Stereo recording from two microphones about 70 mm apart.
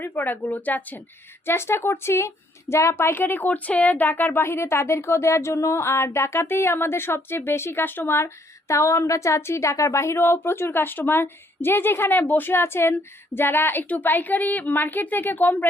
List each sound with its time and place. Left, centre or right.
0.0 s speech: left
1.5 s a woman's voice: left